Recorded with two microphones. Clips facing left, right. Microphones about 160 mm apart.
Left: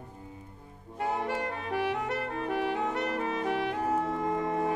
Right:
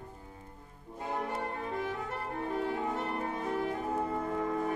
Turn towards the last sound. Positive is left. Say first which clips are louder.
# left 3 dB
turn(degrees=85)